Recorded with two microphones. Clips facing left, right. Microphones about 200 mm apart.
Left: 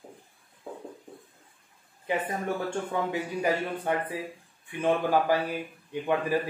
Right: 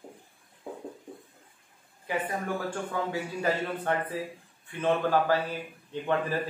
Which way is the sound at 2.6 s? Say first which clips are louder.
Left 2 dB; 15° left (ahead or behind).